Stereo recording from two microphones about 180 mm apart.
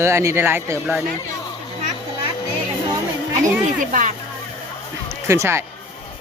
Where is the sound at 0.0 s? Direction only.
15° right (ahead or behind).